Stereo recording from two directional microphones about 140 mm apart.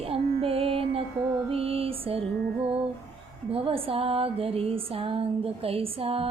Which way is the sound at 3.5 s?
40° right (ahead or behind).